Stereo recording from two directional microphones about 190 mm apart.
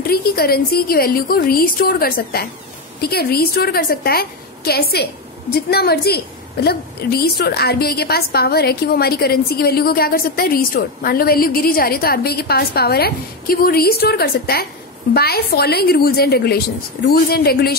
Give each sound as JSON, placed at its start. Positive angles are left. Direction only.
{"t": 0.0, "sound": "a woman's voice", "side_deg": 55}